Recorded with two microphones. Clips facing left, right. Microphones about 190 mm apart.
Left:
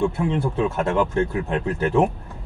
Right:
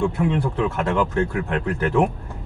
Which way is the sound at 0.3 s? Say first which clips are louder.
Even; 25° left (ahead or behind).